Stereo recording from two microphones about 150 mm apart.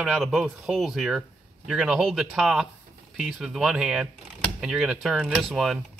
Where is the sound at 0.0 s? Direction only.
5° right (ahead or behind).